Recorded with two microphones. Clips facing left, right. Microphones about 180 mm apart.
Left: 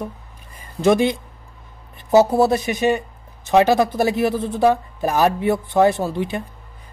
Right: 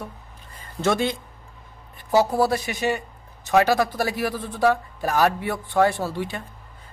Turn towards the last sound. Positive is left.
turn(degrees=20)  # may be behind; listen again after turning